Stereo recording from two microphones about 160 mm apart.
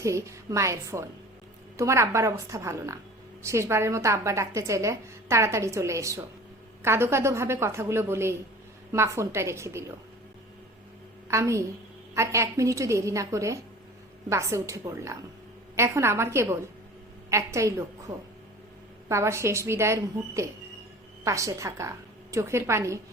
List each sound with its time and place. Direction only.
0.0 s a woman's voice: 20° right (ahead or behind)
11.3 s a woman's voice: 20° right (ahead or behind)
19.0 s a woman's voice: 15° right (ahead or behind)